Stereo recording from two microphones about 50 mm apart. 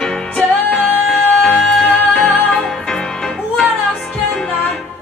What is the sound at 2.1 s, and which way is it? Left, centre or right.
Music, centre.